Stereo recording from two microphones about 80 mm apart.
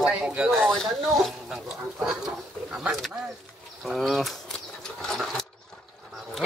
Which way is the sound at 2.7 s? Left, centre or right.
Centre.